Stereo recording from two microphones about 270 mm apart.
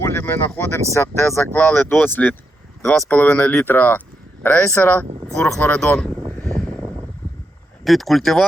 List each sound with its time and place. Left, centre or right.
0.0 s speech: centre
5.0 s speech: centre
5.4 s a sound: centre
7.9 s speech: centre